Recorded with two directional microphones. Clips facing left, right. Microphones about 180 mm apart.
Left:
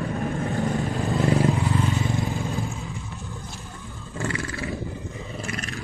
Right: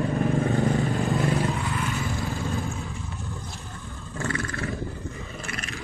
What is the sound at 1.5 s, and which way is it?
Vehicle, 15° left (ahead or behind).